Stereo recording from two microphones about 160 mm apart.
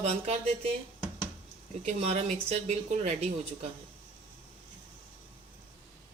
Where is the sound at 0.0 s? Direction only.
40° right (ahead or behind).